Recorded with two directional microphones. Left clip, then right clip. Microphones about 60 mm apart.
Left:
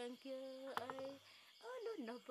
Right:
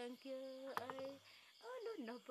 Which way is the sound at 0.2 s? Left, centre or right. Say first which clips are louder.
Right 1 dB; centre.